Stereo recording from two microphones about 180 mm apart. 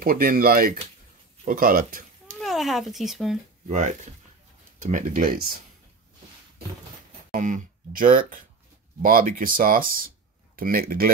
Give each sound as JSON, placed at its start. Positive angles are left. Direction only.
{"t": 0.0, "sound": "speech", "side_deg": -55}
{"t": 2.3, "sound": "speech", "side_deg": 0}
{"t": 3.6, "sound": "speech", "side_deg": -40}
{"t": 7.2, "sound": "speech", "side_deg": -45}